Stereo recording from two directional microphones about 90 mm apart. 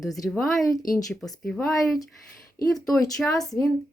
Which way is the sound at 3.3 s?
40° left (ahead or behind).